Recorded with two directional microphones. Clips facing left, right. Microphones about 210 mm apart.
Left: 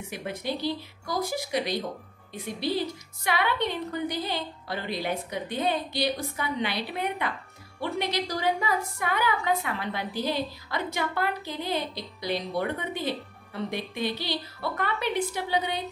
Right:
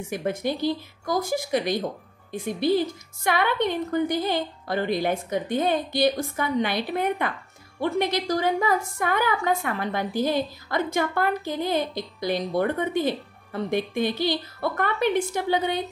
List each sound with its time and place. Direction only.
0.1 s a woman's voice: 45° right (ahead or behind)